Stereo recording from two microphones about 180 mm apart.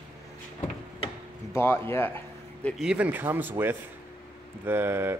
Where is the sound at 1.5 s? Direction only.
15° left (ahead or behind).